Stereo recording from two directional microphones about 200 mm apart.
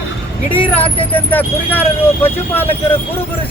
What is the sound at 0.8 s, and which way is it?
Speech, 25° left (ahead or behind).